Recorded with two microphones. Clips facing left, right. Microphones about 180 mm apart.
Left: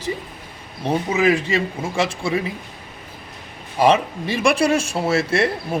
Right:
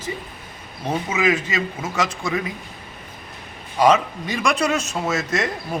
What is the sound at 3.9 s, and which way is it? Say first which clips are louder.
A man's voice: left 1 dB; 30° left (ahead or behind).